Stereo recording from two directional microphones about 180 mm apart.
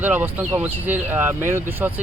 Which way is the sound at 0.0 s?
10° right (ahead or behind).